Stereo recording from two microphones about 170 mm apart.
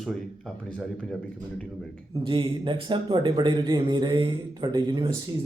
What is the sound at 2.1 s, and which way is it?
Speech, 30° right (ahead or behind).